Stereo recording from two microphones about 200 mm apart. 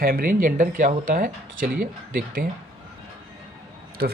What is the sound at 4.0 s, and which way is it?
Speech, 55° right (ahead or behind).